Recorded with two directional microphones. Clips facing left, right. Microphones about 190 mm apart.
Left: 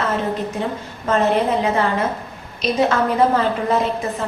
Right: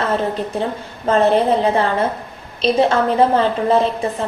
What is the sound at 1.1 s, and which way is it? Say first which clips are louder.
A woman's voice: right 3 dB; 30° right (ahead or behind).